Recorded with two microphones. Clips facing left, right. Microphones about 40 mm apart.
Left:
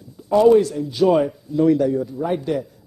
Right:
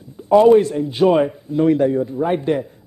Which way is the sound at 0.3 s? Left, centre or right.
Right.